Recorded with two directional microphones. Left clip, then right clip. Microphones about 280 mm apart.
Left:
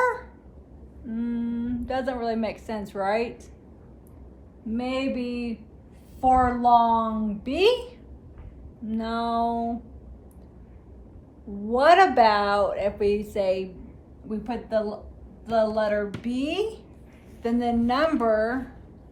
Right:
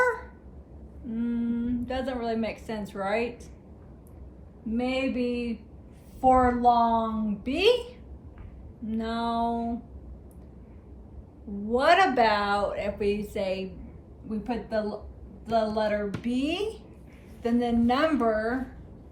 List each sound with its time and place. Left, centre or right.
1.1 s a woman's voice: centre
4.8 s a woman's voice: centre
11.7 s a woman's voice: centre